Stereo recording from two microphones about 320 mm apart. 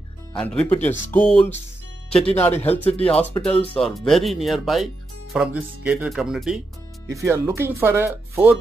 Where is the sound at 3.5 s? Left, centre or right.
Centre.